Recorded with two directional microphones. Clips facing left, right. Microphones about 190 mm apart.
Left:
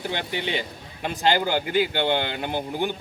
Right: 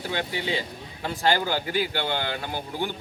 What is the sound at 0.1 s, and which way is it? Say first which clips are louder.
A man's voice: right 2 dB; 20° left (ahead or behind).